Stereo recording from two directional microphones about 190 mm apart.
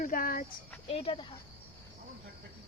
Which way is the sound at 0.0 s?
45° left (ahead or behind).